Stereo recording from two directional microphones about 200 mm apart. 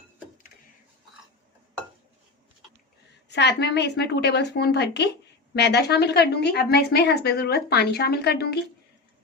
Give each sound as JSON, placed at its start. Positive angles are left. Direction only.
{"t": 3.2, "sound": "a woman's voice", "side_deg": 60}